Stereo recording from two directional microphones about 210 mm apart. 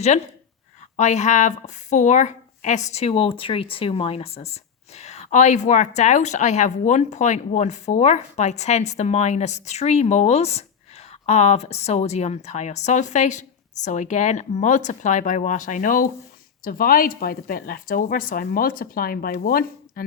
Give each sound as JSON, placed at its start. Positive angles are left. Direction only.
{"t": 0.9, "sound": "a woman's voice", "side_deg": 35}